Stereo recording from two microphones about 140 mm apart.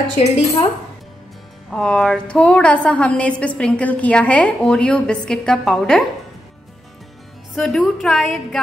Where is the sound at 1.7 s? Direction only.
5° left (ahead or behind).